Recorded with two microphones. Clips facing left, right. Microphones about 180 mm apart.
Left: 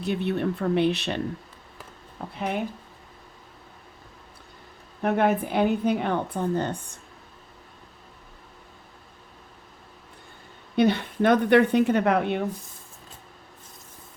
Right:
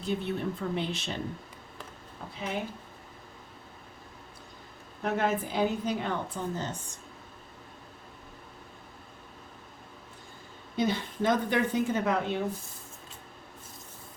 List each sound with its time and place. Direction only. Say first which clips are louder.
0.0 s speech: left 5 dB; 70° left (ahead or behind)
2.3 s a woman's voice: left 6 dB; 60° left (ahead or behind)
5.0 s a woman's voice: left 6 dB; 60° left (ahead or behind)
10.8 s a woman's voice: left 7 dB; 65° left (ahead or behind)